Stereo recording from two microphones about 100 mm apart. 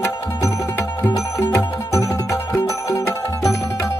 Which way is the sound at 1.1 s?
40° left (ahead or behind).